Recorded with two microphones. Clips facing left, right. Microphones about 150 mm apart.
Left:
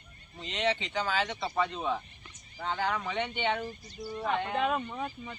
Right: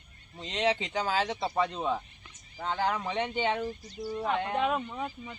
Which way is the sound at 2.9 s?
30° right (ahead or behind).